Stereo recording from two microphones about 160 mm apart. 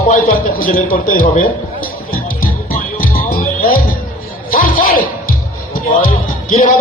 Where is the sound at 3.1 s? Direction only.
60° left (ahead or behind).